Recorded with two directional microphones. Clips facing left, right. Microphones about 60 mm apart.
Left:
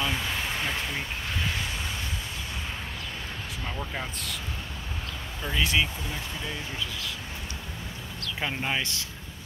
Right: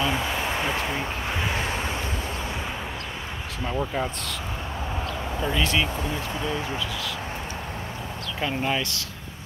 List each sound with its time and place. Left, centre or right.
0.0 s a sound: centre
5.5 s speech: centre
8.4 s speech: centre